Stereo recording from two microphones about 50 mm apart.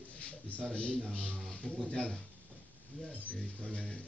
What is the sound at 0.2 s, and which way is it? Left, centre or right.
A man's voice, left.